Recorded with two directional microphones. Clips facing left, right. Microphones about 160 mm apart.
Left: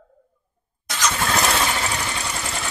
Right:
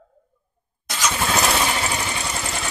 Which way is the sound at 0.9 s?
5° right (ahead or behind).